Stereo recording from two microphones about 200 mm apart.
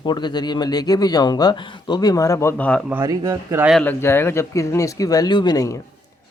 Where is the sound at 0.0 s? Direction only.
20° left (ahead or behind).